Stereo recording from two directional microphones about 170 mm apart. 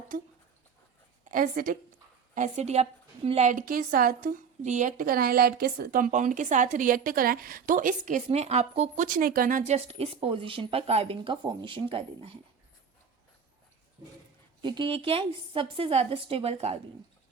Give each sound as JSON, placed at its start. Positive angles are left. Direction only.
{"t": 1.2, "sound": "a woman's voice", "side_deg": -55}
{"t": 2.3, "sound": "a woman's voice", "side_deg": -45}
{"t": 9.0, "sound": "speech", "side_deg": -55}
{"t": 14.6, "sound": "speech", "side_deg": -25}